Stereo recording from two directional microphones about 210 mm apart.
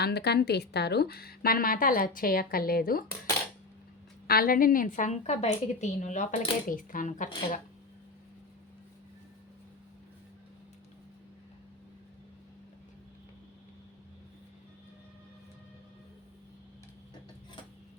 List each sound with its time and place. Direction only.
0.0 s a woman's voice: 50° left (ahead or behind)
4.3 s a woman's voice: 45° left (ahead or behind)